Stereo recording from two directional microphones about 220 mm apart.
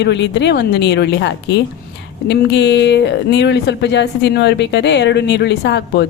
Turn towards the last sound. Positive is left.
turn(degrees=50)  # may be behind; listen again after turning